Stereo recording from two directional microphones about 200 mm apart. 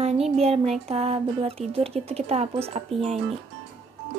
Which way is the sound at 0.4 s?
30° right (ahead or behind).